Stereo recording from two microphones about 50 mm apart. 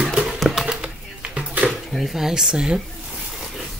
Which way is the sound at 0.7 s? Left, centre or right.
Centre.